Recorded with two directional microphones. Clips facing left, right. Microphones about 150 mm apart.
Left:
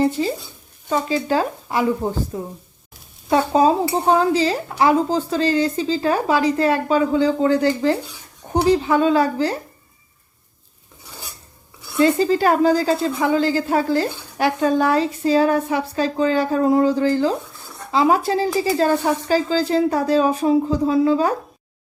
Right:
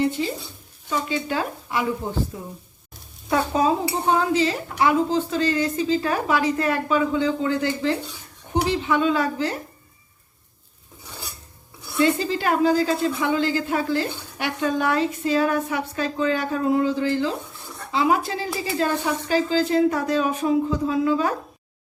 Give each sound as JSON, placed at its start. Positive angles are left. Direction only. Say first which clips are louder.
{"t": 0.2, "sound": "a woman's voice", "louder": "left 4 dB", "side_deg": 35}
{"t": 11.9, "sound": "a woman's voice", "louder": "left 5 dB", "side_deg": 40}